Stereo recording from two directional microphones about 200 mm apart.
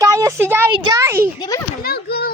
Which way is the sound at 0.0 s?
15° right (ahead or behind).